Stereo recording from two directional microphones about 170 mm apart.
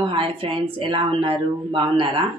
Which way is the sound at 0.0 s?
30° right (ahead or behind).